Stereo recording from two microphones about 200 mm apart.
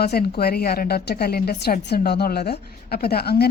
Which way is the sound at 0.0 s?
50° left (ahead or behind).